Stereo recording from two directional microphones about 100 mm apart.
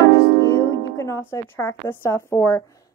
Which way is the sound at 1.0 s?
25° left (ahead or behind).